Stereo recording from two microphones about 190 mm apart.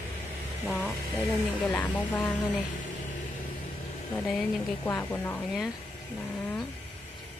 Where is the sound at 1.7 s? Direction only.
10° left (ahead or behind).